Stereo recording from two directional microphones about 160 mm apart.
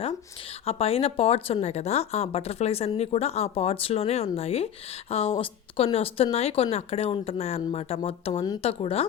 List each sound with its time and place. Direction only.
0.6 s speech: 40° left (ahead or behind)